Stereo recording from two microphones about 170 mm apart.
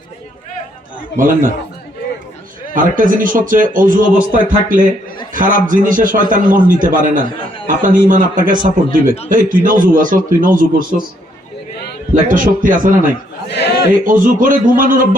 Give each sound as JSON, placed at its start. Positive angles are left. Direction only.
{"t": 1.1, "sound": "a man's voice", "side_deg": -55}
{"t": 2.7, "sound": "a man's voice", "side_deg": -50}
{"t": 12.3, "sound": "a man's voice", "side_deg": -50}